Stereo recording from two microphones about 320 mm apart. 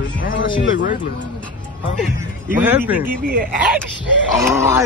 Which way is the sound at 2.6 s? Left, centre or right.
Centre.